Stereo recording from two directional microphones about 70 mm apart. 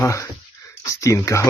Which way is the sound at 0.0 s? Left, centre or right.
Left.